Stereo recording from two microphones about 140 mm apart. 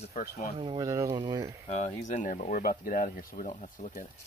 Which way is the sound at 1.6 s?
55° left (ahead or behind).